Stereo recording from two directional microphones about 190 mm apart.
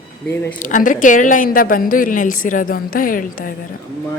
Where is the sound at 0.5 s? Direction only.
45° left (ahead or behind).